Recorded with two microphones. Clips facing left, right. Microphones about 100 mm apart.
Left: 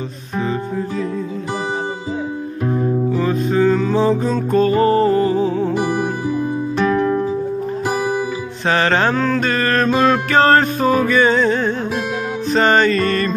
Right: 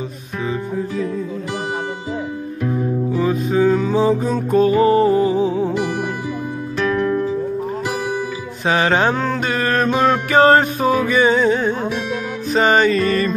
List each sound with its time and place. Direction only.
3.1 s music: 10° right (ahead or behind)
6.9 s music: 20° left (ahead or behind)
8.6 s mantra: 10° right (ahead or behind)